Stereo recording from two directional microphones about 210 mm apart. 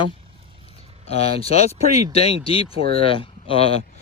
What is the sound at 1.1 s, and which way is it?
Speech, 30° left (ahead or behind).